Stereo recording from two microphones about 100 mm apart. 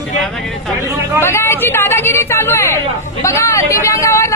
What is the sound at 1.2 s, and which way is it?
Speech, 25° left (ahead or behind).